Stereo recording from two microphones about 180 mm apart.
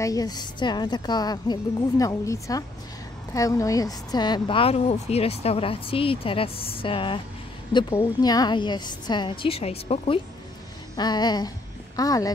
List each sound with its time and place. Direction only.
0.0 s speech: 20° left (ahead or behind)